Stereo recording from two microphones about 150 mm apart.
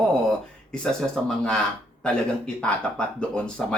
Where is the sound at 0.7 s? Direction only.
5° left (ahead or behind).